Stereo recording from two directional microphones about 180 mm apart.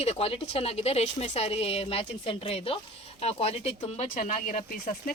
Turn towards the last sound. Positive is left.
turn(degrees=50)  # may be behind; listen again after turning